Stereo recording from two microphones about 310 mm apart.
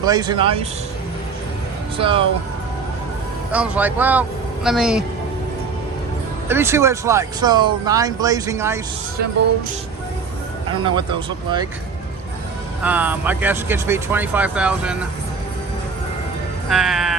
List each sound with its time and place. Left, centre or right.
0.0 s speech: centre
2.0 s speech: centre
3.5 s speech: centre
6.5 s speech: centre
10.7 s speech: centre
12.8 s speech: centre
16.6 s speech: centre